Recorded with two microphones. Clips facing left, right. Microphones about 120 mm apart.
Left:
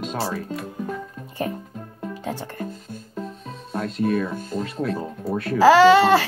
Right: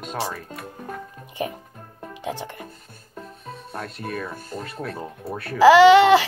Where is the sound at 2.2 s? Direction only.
15° right (ahead or behind).